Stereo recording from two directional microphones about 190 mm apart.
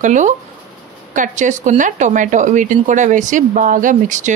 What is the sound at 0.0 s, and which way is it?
Speech, 40° right (ahead or behind).